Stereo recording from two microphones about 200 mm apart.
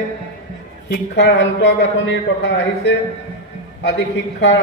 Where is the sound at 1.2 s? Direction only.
60° left (ahead or behind).